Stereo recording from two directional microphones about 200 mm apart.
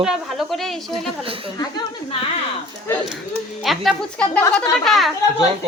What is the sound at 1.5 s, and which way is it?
Speech, 20° left (ahead or behind).